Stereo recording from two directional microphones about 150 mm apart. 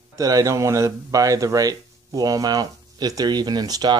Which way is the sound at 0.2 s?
25° right (ahead or behind).